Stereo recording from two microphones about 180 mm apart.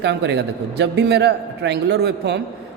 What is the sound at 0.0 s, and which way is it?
A man's voice, 75° right (ahead or behind).